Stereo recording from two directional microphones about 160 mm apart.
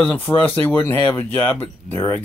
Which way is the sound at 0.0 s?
10° left (ahead or behind).